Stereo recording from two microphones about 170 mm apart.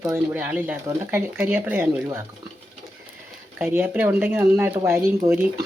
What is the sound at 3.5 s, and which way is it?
Speech, 10° right (ahead or behind).